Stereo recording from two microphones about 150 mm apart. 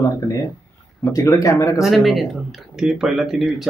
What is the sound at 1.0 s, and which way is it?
Speech, 20° left (ahead or behind).